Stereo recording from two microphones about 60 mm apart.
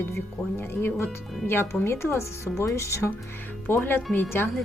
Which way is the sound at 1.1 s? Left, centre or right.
Centre.